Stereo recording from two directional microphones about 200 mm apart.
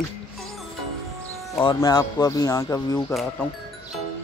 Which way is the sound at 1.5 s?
20° left (ahead or behind).